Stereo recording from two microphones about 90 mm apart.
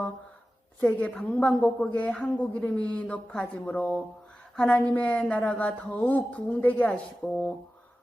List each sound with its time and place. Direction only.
0.9 s a woman's voice: 15° left (ahead or behind)